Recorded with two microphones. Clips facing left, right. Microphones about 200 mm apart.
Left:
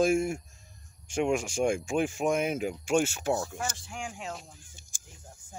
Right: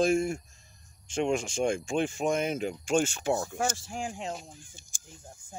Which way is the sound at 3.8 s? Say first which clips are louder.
Right 3 dB; 40° right (ahead or behind).